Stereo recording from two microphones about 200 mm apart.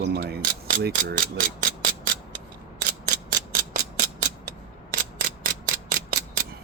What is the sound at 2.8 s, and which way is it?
Mechanisms, 55° right (ahead or behind).